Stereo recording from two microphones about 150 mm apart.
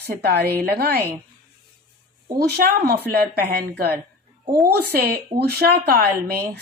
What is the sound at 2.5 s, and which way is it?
Speech, 80° right.